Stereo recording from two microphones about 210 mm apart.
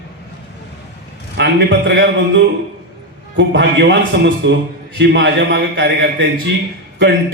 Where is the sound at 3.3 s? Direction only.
55° right (ahead or behind).